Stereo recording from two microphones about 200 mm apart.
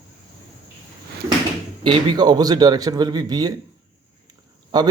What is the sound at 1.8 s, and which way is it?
Speech, 20° right (ahead or behind).